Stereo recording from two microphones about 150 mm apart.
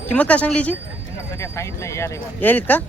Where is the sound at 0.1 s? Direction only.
10° left (ahead or behind).